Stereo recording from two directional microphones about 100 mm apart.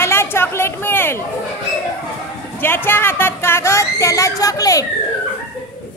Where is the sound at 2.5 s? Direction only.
20° left (ahead or behind).